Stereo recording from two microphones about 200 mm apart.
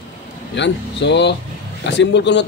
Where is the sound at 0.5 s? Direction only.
60° left (ahead or behind).